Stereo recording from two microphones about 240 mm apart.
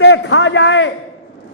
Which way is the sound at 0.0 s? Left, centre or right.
Left.